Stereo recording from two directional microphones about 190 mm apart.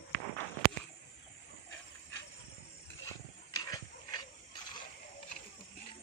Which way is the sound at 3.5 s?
20° left (ahead or behind).